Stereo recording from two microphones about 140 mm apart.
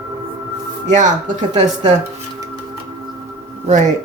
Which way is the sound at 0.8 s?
60° right (ahead or behind).